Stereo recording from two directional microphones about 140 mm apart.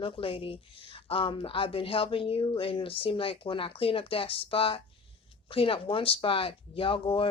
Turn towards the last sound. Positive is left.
turn(degrees=40)  # may be behind; listen again after turning